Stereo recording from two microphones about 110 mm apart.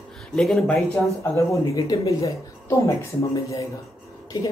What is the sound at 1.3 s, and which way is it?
Speech, 30° left (ahead or behind).